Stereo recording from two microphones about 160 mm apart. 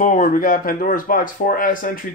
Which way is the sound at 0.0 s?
55° left (ahead or behind).